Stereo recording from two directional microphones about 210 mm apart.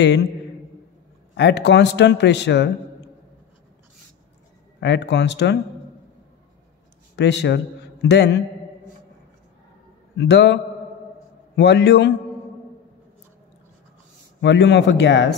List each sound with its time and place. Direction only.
1.3 s a man's voice: 55° left (ahead or behind)
4.7 s a man's voice: 55° left (ahead or behind)
7.2 s a man's voice: 55° left (ahead or behind)
10.1 s a man's voice: 55° left (ahead or behind)
14.4 s a man's voice: 55° left (ahead or behind)